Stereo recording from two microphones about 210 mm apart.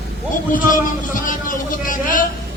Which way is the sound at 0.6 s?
40° left (ahead or behind).